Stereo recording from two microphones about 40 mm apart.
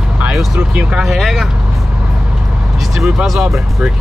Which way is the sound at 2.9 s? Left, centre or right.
Centre.